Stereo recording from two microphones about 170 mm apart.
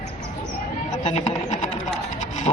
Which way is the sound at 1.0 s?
40° left (ahead or behind).